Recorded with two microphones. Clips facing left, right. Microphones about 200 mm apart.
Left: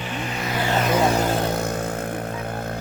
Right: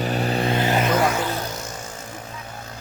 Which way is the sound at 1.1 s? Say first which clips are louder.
Left 4 dB; 45° left (ahead or behind).